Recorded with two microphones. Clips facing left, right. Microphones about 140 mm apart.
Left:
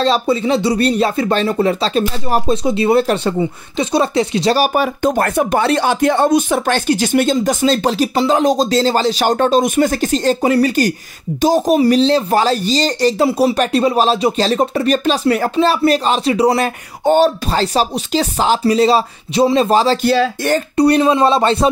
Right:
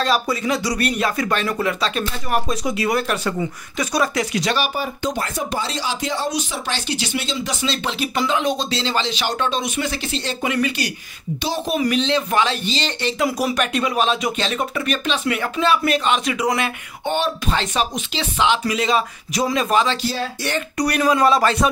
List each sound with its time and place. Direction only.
0.0 s speech: 30° left (ahead or behind)
5.0 s speech: 55° left (ahead or behind); by 20.0 s 35° left (ahead or behind)
20.0 s speech: 65° left (ahead or behind)
20.7 s speech: 30° left (ahead or behind)